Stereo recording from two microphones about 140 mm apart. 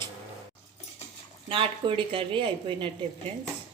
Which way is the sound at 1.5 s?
40° right (ahead or behind).